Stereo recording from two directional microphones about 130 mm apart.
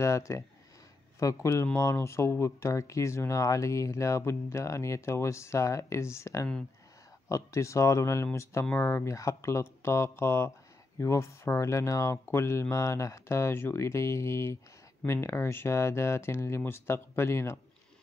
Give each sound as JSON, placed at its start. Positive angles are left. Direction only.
{"t": 0.0, "sound": "speech", "side_deg": 25}